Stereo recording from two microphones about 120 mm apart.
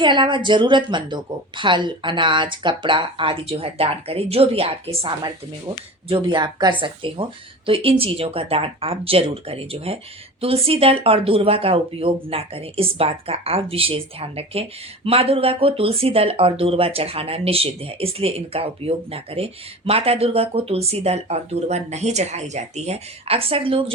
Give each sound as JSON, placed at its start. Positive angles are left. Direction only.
{"t": 0.0, "sound": "speech", "side_deg": -40}